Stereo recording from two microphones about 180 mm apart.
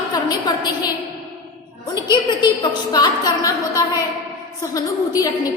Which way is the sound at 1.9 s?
25° left (ahead or behind).